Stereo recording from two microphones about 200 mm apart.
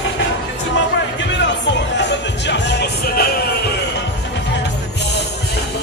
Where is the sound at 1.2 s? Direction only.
65° left (ahead or behind).